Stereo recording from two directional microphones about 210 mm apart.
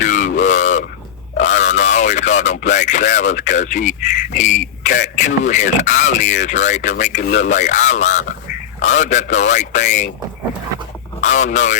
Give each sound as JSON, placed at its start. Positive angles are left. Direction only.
{"t": 0.0, "sound": "a sound", "side_deg": 35}
{"t": 1.4, "sound": "speech", "side_deg": 35}
{"t": 11.2, "sound": "speech", "side_deg": 35}